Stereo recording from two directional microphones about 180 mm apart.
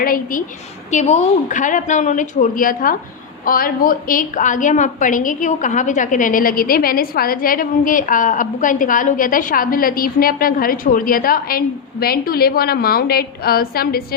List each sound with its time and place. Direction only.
0.0 s a woman's voice: 50° left (ahead or behind)
0.9 s a woman's voice: 40° left (ahead or behind); by 14.0 s 55° left (ahead or behind)